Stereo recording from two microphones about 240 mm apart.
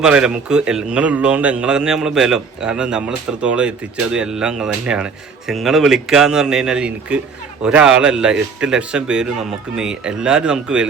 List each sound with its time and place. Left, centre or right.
0.0 s speech: centre